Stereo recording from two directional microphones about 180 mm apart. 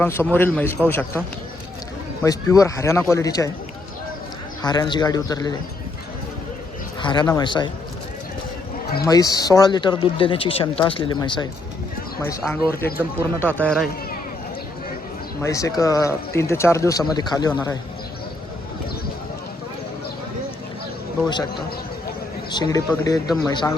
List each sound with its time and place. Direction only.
0.0 s a man's voice: 15° left (ahead or behind)
2.2 s a man's voice: 20° left (ahead or behind)
4.6 s speech: 25° left (ahead or behind)
7.0 s speech: 25° left (ahead or behind)
9.1 s speech: 20° left (ahead or behind)
12.5 s a man's voice: 10° left (ahead or behind)
15.4 s a man's voice: 15° left (ahead or behind)
22.5 s speech: 20° left (ahead or behind)